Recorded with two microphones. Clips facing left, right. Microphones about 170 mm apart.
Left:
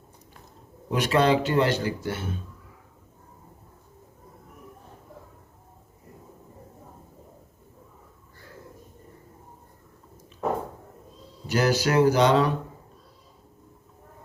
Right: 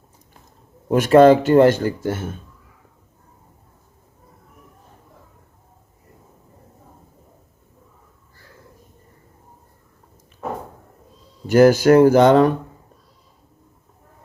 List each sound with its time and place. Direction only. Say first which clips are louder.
0.9 s speech: right 11 dB; 50° right (ahead or behind)
11.4 s speech: right 11 dB; 50° right (ahead or behind)